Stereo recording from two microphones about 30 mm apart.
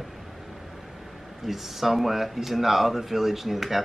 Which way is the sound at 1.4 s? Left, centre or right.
Centre.